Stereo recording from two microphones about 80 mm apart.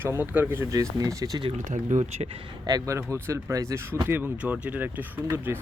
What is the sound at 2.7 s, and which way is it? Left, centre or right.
Speech, right.